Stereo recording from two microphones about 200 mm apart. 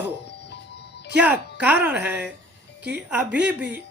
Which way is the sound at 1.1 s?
5° right (ahead or behind).